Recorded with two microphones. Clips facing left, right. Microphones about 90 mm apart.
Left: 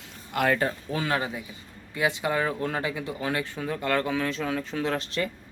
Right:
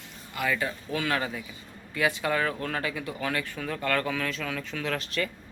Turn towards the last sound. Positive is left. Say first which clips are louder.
# left 3 dB
turn(degrees=30)  # may be behind; listen again after turning